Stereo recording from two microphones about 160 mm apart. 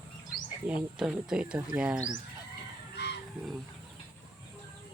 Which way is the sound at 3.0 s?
90° left.